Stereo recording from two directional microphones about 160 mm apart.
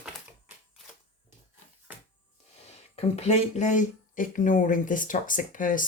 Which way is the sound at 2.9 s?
40° left (ahead or behind).